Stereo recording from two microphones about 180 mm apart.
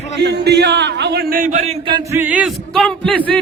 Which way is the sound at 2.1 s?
10° right (ahead or behind).